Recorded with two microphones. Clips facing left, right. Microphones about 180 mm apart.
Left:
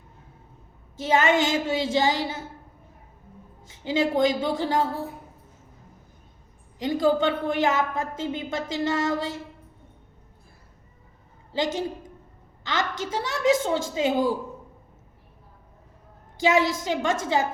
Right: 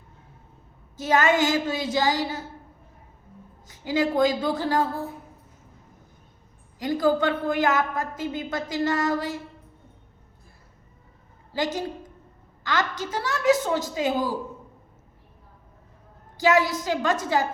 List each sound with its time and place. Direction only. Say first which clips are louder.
0.9 s a woman's voice: even; 20° left (ahead or behind)
3.7 s a woman's voice: even; 20° left (ahead or behind)
6.7 s a woman's voice: even; 20° left (ahead or behind)
11.5 s a woman's voice: left 1 dB; 20° left (ahead or behind)
16.4 s a woman's voice: right 1 dB; 20° left (ahead or behind)